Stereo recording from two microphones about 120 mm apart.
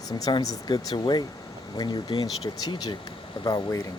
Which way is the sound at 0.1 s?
35° left (ahead or behind).